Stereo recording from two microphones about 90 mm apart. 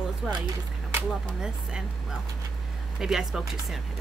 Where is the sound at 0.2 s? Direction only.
5° right (ahead or behind).